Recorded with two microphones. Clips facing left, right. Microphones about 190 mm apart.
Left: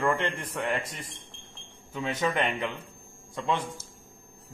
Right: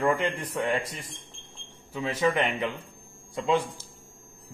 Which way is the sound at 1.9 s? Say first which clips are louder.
Right 3 dB; 10° right (ahead or behind).